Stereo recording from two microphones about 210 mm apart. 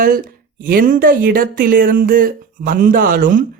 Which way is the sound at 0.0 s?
40° right (ahead or behind).